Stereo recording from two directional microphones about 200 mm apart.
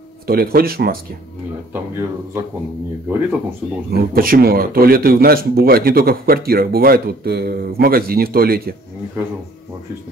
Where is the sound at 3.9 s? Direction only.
45° right (ahead or behind).